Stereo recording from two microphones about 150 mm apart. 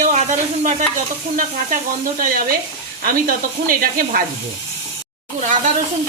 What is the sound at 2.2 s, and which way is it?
Sizzle, 70° right (ahead or behind).